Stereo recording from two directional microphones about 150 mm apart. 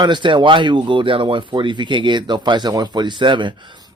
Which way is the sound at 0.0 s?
30° right (ahead or behind).